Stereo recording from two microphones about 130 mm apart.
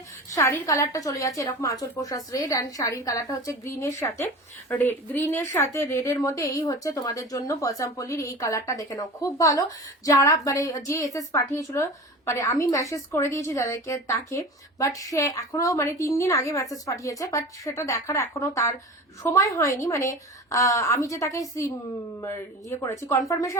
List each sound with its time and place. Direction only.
0.3 s a woman's voice: 25° left (ahead or behind)